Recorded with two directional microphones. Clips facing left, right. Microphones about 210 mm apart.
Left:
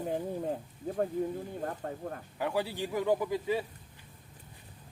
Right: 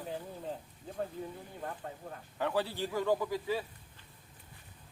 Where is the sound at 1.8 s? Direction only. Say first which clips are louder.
Left 6 dB; 45° left (ahead or behind).